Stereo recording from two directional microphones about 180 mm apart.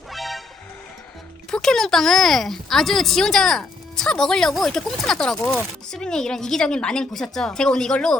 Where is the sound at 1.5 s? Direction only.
5° left (ahead or behind).